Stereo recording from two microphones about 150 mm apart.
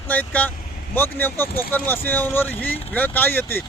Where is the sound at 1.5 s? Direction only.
90° left.